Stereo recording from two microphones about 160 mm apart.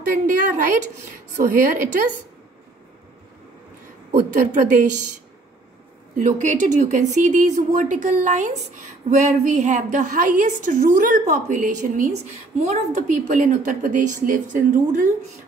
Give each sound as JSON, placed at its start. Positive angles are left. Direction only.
{"t": 0.3, "sound": "speech", "side_deg": -55}
{"t": 4.2, "sound": "speech", "side_deg": -50}
{"t": 6.1, "sound": "a woman's voice", "side_deg": -50}